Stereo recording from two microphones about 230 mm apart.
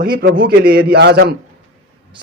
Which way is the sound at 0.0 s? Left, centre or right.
Right.